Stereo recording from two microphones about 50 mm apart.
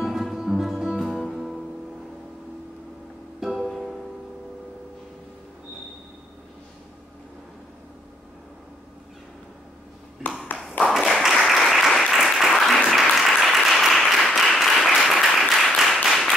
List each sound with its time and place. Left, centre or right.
0.0 s music: centre
3.3 s music: centre
11.0 s applause: centre